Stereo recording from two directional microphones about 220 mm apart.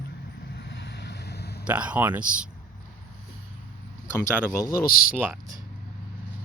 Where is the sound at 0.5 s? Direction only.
50° left (ahead or behind).